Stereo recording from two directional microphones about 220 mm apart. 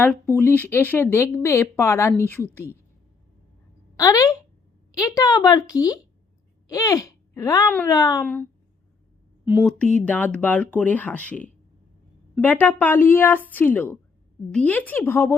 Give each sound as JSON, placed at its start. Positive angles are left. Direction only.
{"t": 0.0, "sound": "speech", "side_deg": 10}
{"t": 3.9, "sound": "a woman's voice", "side_deg": 15}
{"t": 9.5, "sound": "speech", "side_deg": 5}